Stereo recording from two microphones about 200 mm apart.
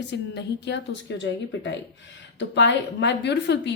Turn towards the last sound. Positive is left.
turn(degrees=60)  # may be behind; listen again after turning